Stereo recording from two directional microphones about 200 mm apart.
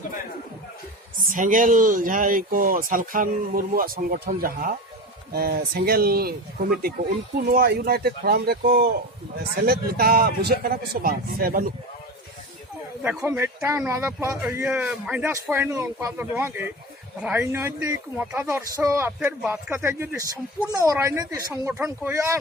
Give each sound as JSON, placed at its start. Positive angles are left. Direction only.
{"t": 1.3, "sound": "speech", "side_deg": -40}
{"t": 7.3, "sound": "speech", "side_deg": -50}
{"t": 13.0, "sound": "speech", "side_deg": -10}